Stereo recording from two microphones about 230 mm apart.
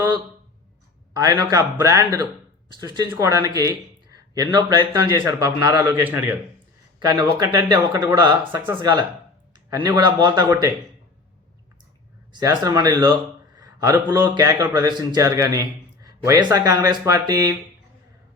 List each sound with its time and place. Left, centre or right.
1.1 s a man's voice: centre
9.6 s a man's voice: centre
12.3 s a man's voice: centre